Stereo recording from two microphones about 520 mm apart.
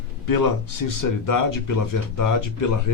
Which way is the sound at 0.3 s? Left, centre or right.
Left.